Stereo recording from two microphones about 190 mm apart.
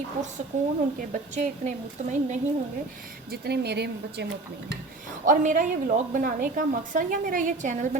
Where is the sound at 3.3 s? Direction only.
60° right (ahead or behind).